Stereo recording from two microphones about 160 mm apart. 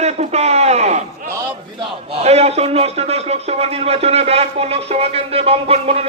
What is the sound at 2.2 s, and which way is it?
A man's voice, 40° right (ahead or behind).